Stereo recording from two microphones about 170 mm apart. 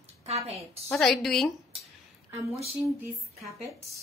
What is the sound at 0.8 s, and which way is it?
Speech, centre (ahead or behind).